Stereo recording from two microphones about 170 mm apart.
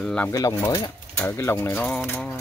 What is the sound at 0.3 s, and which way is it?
Speech, 20° left (ahead or behind).